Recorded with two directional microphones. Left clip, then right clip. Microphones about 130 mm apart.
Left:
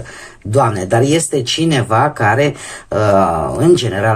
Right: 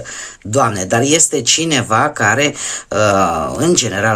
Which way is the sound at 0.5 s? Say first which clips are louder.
Left 1 dB; 35° right (ahead or behind).